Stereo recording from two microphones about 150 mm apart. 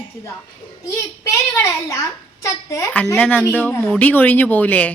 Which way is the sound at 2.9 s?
10° left (ahead or behind).